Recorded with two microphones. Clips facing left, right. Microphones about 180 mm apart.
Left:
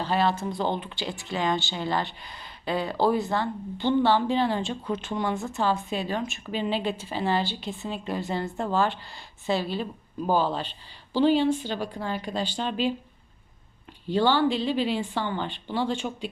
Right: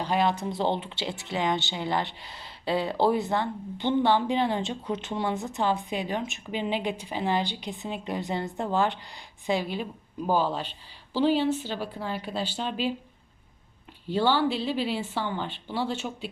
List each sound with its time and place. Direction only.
0.0 s a woman's voice: 15° right (ahead or behind)
14.1 s a woman's voice: 10° right (ahead or behind)